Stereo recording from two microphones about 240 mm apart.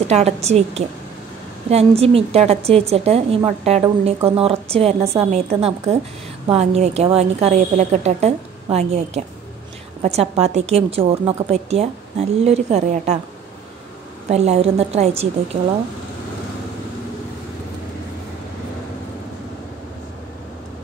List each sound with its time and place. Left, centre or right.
0.0 s a woman's voice: right
14.3 s a woman's voice: right